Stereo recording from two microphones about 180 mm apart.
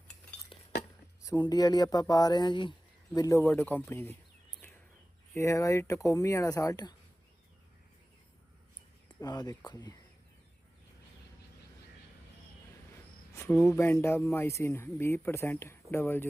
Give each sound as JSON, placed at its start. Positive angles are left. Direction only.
{"t": 1.2, "sound": "speech", "side_deg": 20}
{"t": 5.3, "sound": "speech", "side_deg": 15}
{"t": 9.0, "sound": "speech", "side_deg": 20}
{"t": 13.3, "sound": "speech", "side_deg": 15}